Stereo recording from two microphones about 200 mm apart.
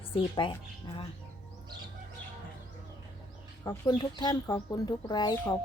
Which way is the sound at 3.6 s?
20° left (ahead or behind).